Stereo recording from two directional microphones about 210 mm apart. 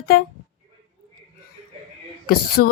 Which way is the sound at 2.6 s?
45° left (ahead or behind).